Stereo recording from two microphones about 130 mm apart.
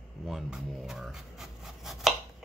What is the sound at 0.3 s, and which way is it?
Speech, centre (ahead or behind).